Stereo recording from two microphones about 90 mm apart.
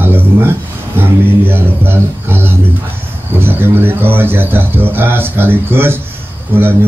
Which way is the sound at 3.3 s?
25° right (ahead or behind).